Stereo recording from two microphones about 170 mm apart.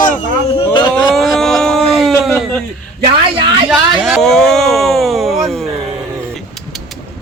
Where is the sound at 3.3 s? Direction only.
30° right (ahead or behind).